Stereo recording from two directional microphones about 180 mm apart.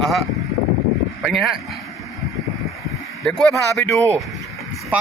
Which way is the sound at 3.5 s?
15° left (ahead or behind).